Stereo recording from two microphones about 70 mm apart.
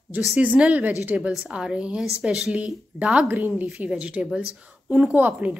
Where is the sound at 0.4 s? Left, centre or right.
Centre.